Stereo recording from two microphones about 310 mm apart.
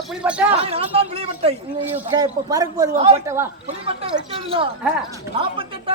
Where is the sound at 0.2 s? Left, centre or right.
Centre.